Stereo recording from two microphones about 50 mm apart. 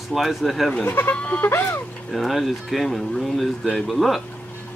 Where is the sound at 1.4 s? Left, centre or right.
Left.